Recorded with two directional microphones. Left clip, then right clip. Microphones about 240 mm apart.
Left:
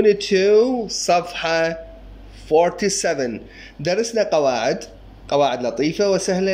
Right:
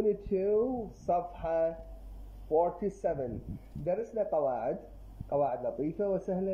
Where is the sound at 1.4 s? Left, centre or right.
Left.